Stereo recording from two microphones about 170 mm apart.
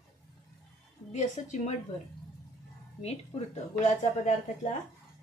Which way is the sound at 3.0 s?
40° left (ahead or behind).